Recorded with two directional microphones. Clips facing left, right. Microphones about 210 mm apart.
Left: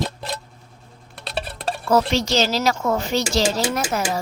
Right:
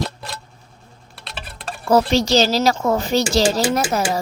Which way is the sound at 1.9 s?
35° right (ahead or behind).